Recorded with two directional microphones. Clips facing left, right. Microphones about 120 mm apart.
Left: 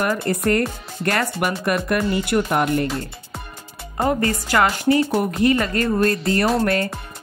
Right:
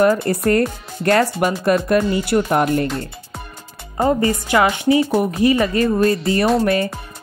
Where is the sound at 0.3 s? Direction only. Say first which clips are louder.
Right 3 dB; 30° right (ahead or behind).